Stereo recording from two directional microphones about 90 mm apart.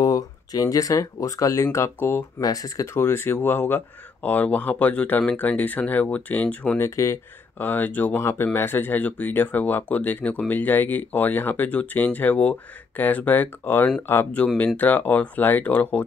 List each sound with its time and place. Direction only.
0.0 s speech: 40° left (ahead or behind); by 2.4 s 25° left (ahead or behind)
2.4 s speech: 40° left (ahead or behind); by 6.8 s 15° left (ahead or behind)
6.8 s speech: 35° left (ahead or behind)
7.5 s speech: 20° left (ahead or behind)